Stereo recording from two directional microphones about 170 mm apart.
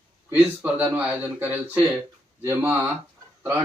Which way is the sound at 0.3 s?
10° right (ahead or behind).